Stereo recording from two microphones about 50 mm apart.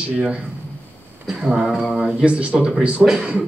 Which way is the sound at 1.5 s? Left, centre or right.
Centre.